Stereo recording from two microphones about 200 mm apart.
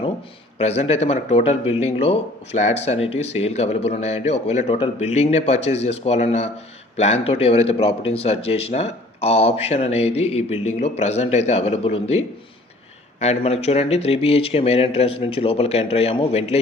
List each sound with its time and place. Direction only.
0.6 s speech: 30° left (ahead or behind)